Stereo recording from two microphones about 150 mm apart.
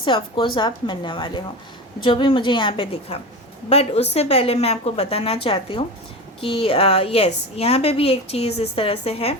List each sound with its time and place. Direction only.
0.0 s a woman's voice: 35° left (ahead or behind)